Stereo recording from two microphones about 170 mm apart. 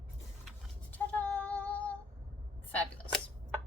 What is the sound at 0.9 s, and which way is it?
Female singing, 5° left (ahead or behind).